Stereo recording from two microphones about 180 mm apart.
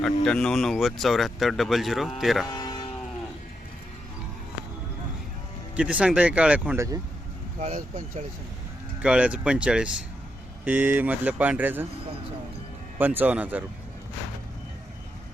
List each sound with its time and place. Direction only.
0.3 s speech: 5° left (ahead or behind)
2.5 s moo: 20° left (ahead or behind)
5.7 s speech: 5° right (ahead or behind)
7.6 s speech: 40° right (ahead or behind)
9.0 s speech: 5° right (ahead or behind)
13.0 s speech: 10° right (ahead or behind)